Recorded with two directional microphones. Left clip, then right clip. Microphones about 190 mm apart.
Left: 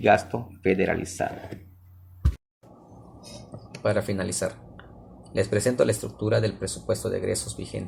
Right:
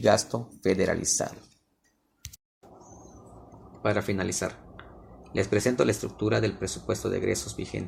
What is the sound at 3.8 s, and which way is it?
Speech, 30° right (ahead or behind).